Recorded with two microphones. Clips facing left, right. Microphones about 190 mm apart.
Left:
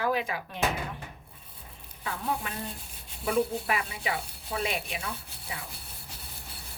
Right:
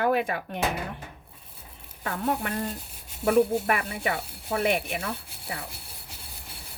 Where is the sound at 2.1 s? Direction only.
55° right (ahead or behind).